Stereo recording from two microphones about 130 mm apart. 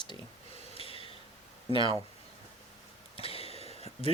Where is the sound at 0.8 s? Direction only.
45° left (ahead or behind).